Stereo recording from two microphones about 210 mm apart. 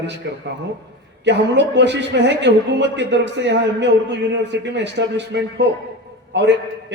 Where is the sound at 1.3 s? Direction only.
55° right (ahead or behind).